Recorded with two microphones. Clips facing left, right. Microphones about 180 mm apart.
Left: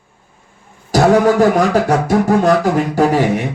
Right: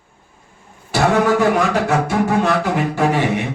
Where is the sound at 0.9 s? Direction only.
40° left (ahead or behind).